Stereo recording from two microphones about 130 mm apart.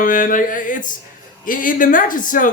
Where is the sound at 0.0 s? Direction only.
90° left.